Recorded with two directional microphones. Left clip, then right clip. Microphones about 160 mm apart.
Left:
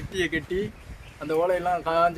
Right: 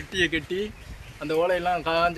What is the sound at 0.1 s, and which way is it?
Speech, 35° left (ahead or behind).